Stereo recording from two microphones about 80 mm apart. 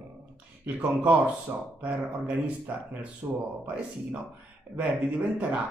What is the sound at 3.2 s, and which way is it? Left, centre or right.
Speech, right.